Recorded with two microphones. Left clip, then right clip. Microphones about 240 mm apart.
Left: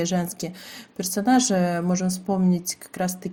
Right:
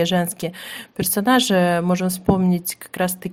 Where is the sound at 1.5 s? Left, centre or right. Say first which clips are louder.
Right 6 dB; right.